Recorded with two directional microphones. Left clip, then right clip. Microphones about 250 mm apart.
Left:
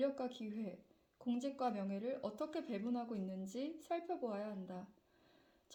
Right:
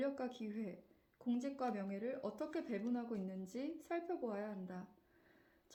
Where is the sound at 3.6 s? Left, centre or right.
Left.